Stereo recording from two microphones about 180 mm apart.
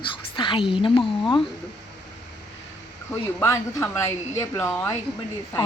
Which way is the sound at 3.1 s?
15° left (ahead or behind).